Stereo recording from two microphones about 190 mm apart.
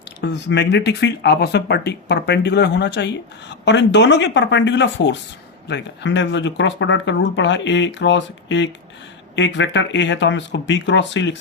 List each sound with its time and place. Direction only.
0.2 s speech: 65° left (ahead or behind)